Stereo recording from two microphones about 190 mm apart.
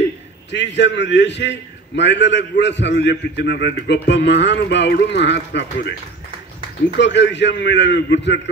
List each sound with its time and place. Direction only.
0.5 s a man's voice: 70° left (ahead or behind)
7.0 s a man's voice: 65° left (ahead or behind)